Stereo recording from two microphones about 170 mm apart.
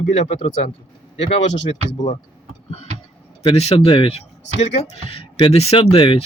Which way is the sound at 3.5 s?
35° left (ahead or behind).